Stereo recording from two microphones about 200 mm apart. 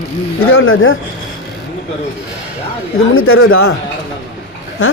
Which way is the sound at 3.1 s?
90° left.